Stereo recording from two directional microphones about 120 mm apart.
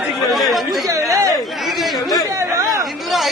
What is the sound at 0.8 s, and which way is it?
Speech, 25° right (ahead or behind).